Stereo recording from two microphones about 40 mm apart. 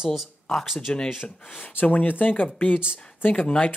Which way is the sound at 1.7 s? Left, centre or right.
Left.